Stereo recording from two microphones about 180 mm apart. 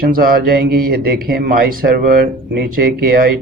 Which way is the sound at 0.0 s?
55° right (ahead or behind).